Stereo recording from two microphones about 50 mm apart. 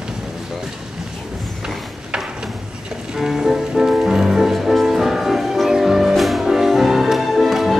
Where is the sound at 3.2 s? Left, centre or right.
Centre.